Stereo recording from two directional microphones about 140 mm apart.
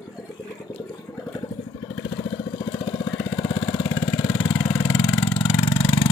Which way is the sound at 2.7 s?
35° left (ahead or behind).